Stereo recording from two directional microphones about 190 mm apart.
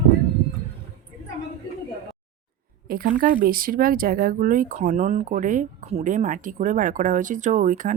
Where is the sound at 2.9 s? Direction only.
50° right (ahead or behind).